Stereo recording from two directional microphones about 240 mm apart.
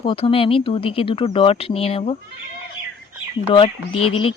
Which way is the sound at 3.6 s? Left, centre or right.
Left.